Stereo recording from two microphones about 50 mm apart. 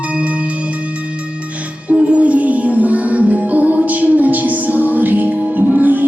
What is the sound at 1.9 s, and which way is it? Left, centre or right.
Music, right.